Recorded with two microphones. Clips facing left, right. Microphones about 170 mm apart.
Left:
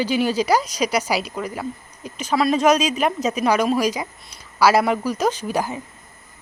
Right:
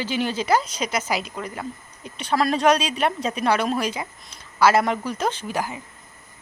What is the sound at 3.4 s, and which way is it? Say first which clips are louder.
Speech: left 3 dB; 10° left (ahead or behind).